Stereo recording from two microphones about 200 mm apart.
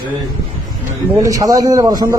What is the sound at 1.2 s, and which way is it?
Speech, 15° right (ahead or behind).